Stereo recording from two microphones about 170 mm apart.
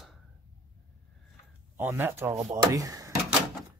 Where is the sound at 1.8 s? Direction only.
10° right (ahead or behind).